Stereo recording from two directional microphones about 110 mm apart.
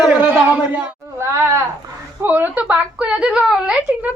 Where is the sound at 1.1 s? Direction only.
25° right (ahead or behind).